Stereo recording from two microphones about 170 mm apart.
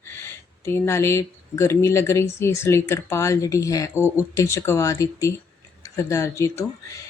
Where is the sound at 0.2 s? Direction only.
15° left (ahead or behind).